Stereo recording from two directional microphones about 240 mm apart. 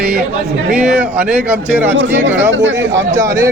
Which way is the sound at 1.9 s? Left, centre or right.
Right.